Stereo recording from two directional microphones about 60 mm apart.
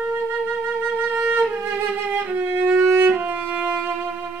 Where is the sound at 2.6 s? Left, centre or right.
Right.